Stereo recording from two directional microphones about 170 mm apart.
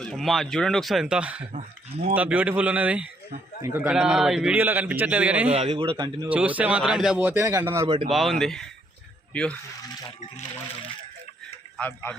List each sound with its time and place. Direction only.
0.0 s speech: centre (ahead or behind)
1.5 s speech: 40° right (ahead or behind)
2.1 s a man's voice: 10° right (ahead or behind)
5.5 s speech: 35° right (ahead or behind)
6.2 s a man's voice: 10° right (ahead or behind)
7.9 s speech: 35° right (ahead or behind)
8.1 s speech: centre (ahead or behind)
11.8 s speech: 10° left (ahead or behind)